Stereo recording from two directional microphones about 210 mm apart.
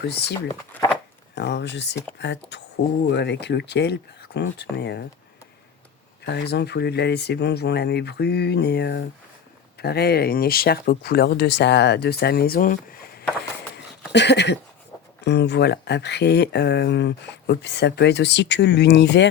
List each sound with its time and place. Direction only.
0.0 s speech: 55° left (ahead or behind)
0.7 s speech: 5° left (ahead or behind)
1.4 s speech: 55° left (ahead or behind)
6.2 s speech: 55° left (ahead or behind)
14.1 s speech: 55° left (ahead or behind)